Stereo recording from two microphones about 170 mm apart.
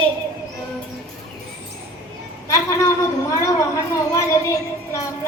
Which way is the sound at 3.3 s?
20° left (ahead or behind).